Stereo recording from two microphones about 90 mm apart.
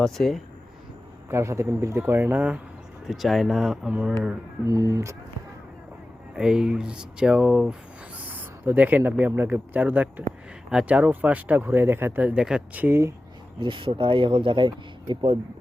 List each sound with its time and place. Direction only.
0.0 s speech: 5° left (ahead or behind)
1.3 s speech: 30° right (ahead or behind)
3.1 s speech: centre (ahead or behind)
4.6 s speech: 35° right (ahead or behind)
6.3 s speech: 10° right (ahead or behind)
8.3 s speech: 20° right (ahead or behind)
12.8 s speech: 30° right (ahead or behind)
13.6 s speech: 70° right (ahead or behind)